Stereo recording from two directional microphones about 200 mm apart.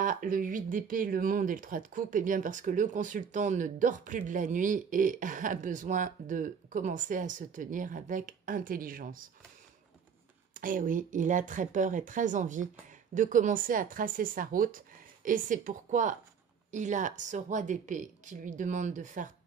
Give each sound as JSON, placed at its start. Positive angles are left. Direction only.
{"t": 0.0, "sound": "speech", "side_deg": -45}
{"t": 10.5, "sound": "speech", "side_deg": -45}